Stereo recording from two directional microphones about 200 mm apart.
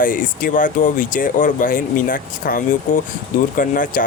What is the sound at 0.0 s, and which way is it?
Speech, 45° left (ahead or behind).